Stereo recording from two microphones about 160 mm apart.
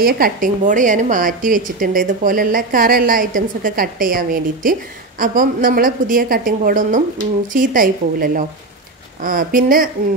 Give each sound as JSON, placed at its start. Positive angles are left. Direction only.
{"t": 0.0, "sound": "a woman's voice", "side_deg": -60}